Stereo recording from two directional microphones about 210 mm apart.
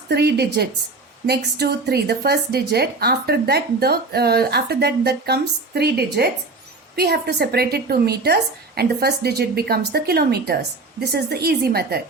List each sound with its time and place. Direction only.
0.1 s a woman's voice: 50° right (ahead or behind)